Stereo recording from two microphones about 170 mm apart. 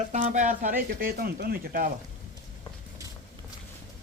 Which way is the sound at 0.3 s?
50° right (ahead or behind).